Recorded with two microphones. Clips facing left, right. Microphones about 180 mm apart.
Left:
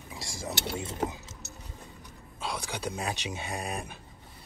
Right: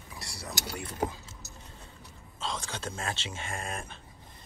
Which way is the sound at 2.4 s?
15° left (ahead or behind).